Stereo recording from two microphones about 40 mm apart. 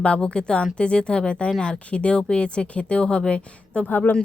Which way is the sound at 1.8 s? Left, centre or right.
Left.